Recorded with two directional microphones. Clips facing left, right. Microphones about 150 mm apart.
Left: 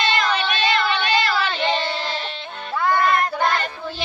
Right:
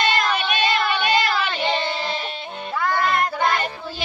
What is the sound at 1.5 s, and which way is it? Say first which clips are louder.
Child singing: left 1 dB; 5° right (ahead or behind).